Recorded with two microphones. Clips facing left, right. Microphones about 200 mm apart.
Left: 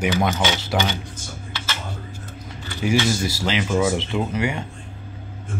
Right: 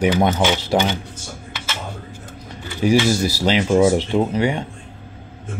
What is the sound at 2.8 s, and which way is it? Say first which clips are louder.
Speech: right 5 dB; 35° right (ahead or behind).